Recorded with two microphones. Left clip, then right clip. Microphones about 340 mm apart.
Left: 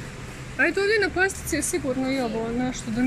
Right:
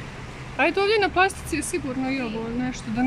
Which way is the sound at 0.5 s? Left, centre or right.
Centre.